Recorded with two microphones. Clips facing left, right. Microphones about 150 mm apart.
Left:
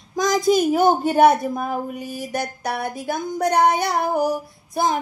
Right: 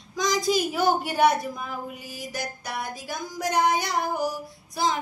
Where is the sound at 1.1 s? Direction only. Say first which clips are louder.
Left 7 dB; 50° left (ahead or behind).